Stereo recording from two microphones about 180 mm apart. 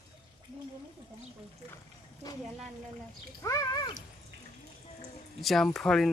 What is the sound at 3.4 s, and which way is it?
Cat, 20° left (ahead or behind).